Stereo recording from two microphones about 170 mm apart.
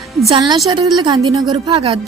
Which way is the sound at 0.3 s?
25° right (ahead or behind).